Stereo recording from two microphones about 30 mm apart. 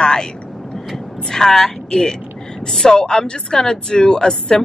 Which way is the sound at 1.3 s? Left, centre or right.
Centre.